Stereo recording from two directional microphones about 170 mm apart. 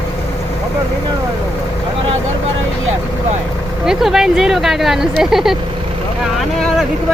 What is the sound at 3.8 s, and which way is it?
Speech, 5° right (ahead or behind).